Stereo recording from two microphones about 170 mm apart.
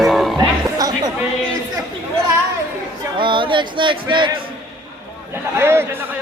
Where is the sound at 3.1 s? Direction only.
30° right (ahead or behind).